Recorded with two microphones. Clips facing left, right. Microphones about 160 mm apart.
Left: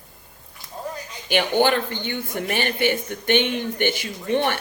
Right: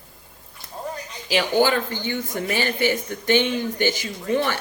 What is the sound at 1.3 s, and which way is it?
Speech, 55° left (ahead or behind).